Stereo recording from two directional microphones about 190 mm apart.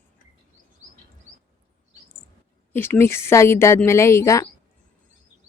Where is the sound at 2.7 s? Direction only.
10° left (ahead or behind).